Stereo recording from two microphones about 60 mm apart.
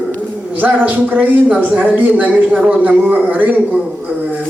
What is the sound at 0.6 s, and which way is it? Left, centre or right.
A man's voice, right.